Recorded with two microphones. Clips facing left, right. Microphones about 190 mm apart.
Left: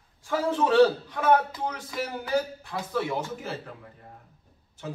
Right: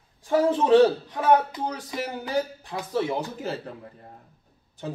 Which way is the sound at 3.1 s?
35° right (ahead or behind).